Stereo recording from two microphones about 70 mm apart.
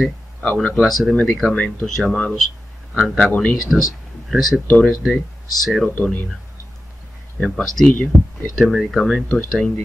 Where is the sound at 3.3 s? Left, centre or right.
Left.